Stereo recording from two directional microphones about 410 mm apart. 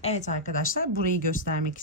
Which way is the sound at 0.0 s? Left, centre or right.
Centre.